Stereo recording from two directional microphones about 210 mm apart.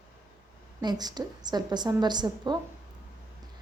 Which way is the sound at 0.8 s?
20° right (ahead or behind).